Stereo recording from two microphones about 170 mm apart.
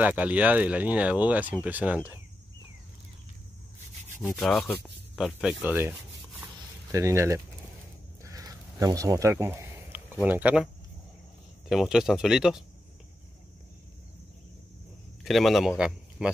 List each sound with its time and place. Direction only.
0.0 s speech: 10° right (ahead or behind)
4.2 s speech: centre (ahead or behind)
6.4 s a sound: 15° right (ahead or behind)
10.2 s speech: 10° right (ahead or behind)
11.7 s speech: centre (ahead or behind)
15.2 s speech: centre (ahead or behind)